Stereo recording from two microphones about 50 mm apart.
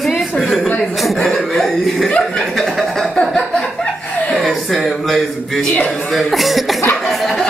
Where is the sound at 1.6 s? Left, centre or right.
Centre.